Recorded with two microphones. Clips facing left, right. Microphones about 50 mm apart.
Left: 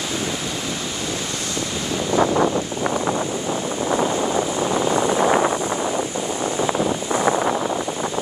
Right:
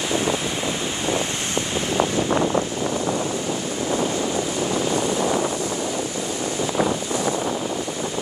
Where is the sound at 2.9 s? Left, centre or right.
Left.